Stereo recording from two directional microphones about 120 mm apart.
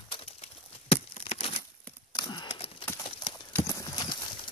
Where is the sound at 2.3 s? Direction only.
40° left (ahead or behind).